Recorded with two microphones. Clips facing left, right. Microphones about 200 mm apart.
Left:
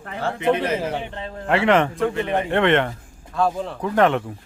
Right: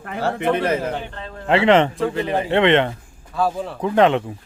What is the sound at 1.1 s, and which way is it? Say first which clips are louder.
Speech: left 2 dB; 25° left (ahead or behind).